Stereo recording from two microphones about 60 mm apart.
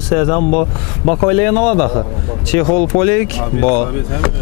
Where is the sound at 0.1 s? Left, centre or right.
Left.